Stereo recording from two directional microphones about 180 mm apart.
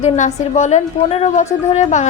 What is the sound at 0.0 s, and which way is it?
A woman's voice, 40° left (ahead or behind).